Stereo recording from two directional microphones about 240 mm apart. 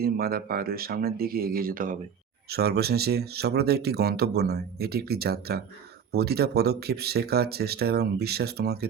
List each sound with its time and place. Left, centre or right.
0.0 s speech: right